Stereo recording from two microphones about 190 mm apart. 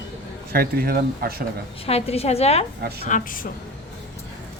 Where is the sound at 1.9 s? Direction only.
30° left (ahead or behind).